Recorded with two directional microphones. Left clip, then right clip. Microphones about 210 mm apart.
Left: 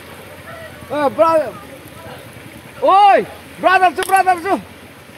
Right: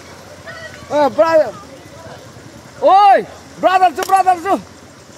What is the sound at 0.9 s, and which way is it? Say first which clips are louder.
Speech: right 2 dB; 40° right (ahead or behind).